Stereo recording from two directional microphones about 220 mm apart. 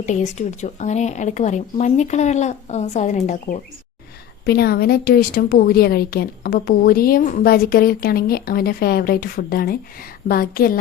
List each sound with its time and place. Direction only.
0.0 s speech: 35° left (ahead or behind)
4.4 s a woman's voice: 45° left (ahead or behind)